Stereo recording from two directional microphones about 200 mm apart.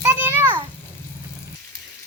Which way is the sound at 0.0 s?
10° right (ahead or behind).